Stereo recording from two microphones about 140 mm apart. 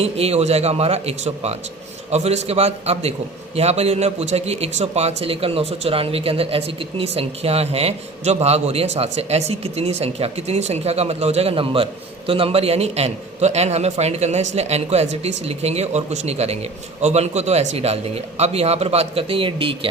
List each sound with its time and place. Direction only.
0.0 s a man's voice: 45° right (ahead or behind)